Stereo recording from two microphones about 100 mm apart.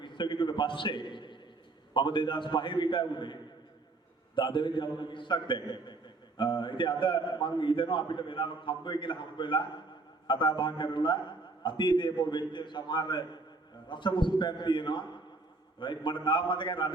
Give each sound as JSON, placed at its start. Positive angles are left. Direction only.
{"t": 0.0, "sound": "a man's voice", "side_deg": 50}
{"t": 4.4, "sound": "a man's voice", "side_deg": 55}